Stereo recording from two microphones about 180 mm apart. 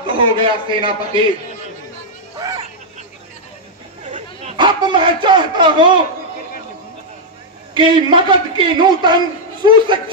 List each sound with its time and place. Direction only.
0.0 s a man's voice: 30° right (ahead or behind)
2.3 s a sound: 20° right (ahead or behind)
4.6 s a man's voice: 25° right (ahead or behind)
7.7 s a man's voice: 25° right (ahead or behind)